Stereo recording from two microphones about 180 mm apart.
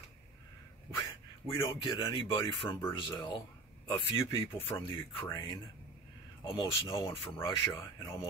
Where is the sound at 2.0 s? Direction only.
25° left (ahead or behind).